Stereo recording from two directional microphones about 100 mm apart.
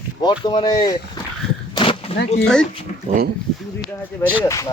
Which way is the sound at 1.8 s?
65° left (ahead or behind).